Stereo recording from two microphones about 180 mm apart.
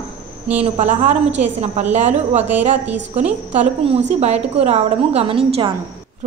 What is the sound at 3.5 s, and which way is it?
A woman's voice, 35° right (ahead or behind).